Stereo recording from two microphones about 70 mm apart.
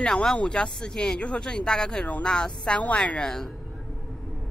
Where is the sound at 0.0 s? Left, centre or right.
Centre.